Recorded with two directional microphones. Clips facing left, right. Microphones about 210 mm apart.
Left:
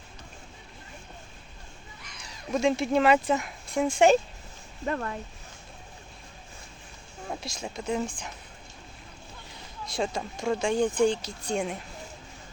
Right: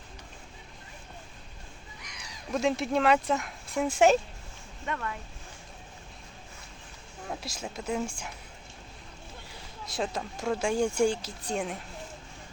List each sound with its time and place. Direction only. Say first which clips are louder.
2.5 s speech: left 3 dB; centre (ahead or behind)
4.9 s speech: left 5 dB; 35° left (ahead or behind)
7.4 s speech: left 3 dB; 5° right (ahead or behind)
9.9 s speech: left 2 dB; centre (ahead or behind)